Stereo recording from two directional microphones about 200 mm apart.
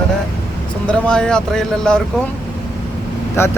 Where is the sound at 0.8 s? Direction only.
5° left (ahead or behind).